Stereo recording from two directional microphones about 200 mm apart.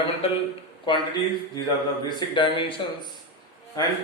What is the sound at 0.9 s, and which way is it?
Speech, 20° left (ahead or behind).